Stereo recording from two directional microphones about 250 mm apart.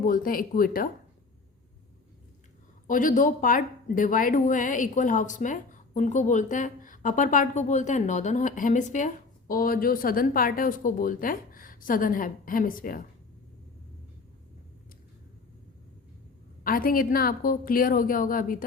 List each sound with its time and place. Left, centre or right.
0.0 s speech: left
2.8 s speech: left
16.6 s speech: left